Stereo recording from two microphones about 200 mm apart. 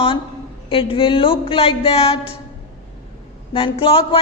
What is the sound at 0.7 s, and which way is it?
A woman's voice, 25° left (ahead or behind).